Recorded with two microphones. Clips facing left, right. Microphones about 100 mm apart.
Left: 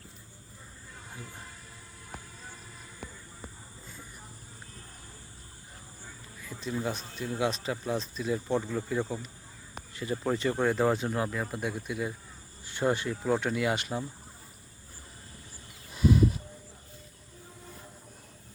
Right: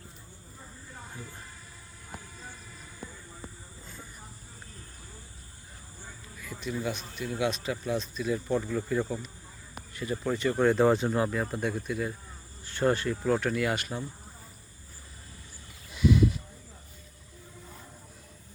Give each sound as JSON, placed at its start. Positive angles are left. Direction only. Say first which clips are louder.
{"t": 6.4, "sound": "speech", "louder": "even", "side_deg": 25}
{"t": 9.9, "sound": "speech", "louder": "even", "side_deg": 25}
{"t": 10.6, "sound": "speech", "louder": "right 6 dB", "side_deg": 5}
{"t": 16.0, "sound": "a sound", "louder": "even", "side_deg": 40}